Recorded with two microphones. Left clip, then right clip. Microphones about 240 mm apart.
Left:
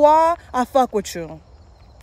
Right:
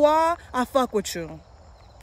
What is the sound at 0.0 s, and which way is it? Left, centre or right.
Speech, centre.